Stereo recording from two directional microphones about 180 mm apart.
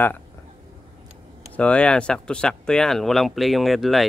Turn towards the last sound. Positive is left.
turn(degrees=0)  # may be behind; listen again after turning